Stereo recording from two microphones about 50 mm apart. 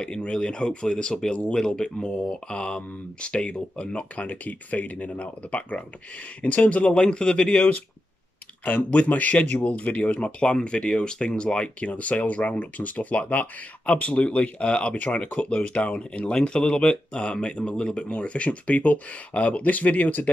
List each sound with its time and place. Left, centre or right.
0.0 s speech: centre